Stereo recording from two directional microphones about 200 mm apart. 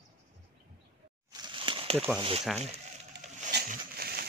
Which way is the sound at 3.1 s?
60° right (ahead or behind).